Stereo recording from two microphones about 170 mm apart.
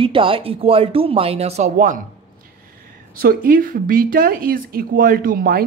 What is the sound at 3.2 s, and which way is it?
Speech, 60° right (ahead or behind).